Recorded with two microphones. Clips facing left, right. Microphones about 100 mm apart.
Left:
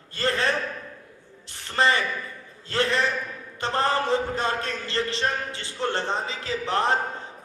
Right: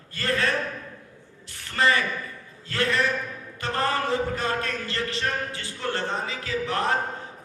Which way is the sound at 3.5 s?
25° left (ahead or behind).